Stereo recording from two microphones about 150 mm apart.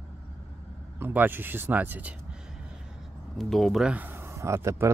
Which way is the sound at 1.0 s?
15° right (ahead or behind).